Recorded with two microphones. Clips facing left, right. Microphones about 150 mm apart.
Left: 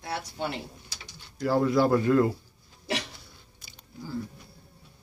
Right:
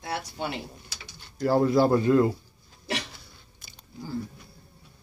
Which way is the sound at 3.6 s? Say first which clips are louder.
Right 2 dB; 55° right (ahead or behind).